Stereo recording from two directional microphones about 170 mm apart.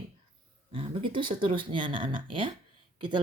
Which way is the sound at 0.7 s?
30° right (ahead or behind).